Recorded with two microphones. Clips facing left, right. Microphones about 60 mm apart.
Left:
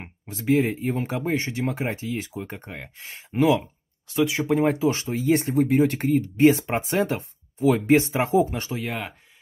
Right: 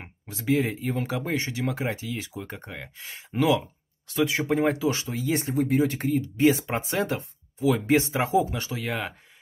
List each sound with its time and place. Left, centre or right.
0.3 s speech: left
8.8 s speech: centre